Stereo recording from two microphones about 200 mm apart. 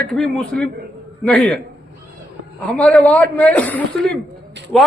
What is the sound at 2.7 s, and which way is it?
A man's voice, 5° left (ahead or behind).